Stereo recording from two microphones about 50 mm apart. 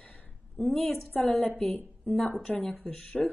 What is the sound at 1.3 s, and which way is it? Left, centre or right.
A woman's voice, centre.